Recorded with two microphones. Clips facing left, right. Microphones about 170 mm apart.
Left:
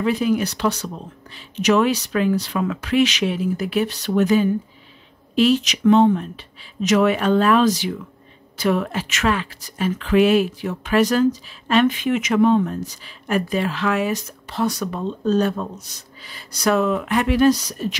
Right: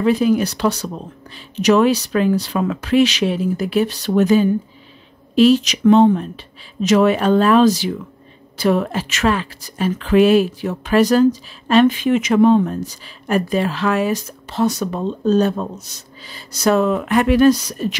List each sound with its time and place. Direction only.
0.0 s a woman's voice: 35° right (ahead or behind); by 17.9 s 60° right (ahead or behind)